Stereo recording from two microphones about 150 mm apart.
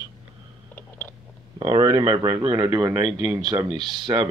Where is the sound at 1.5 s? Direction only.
25° right (ahead or behind).